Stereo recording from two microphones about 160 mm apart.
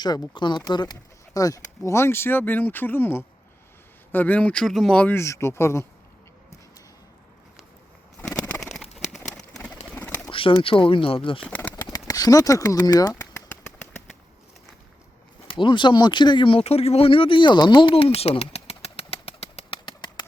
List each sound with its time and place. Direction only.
0.0 s speech: 25° left (ahead or behind)
8.4 s bird: 10° left (ahead or behind)
10.2 s speech: 30° left (ahead or behind)
11.4 s bird: 10° left (ahead or behind)
11.9 s speech: 20° left (ahead or behind)
15.4 s speech: 30° left (ahead or behind)